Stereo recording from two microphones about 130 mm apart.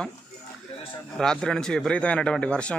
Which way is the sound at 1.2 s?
5° left (ahead or behind).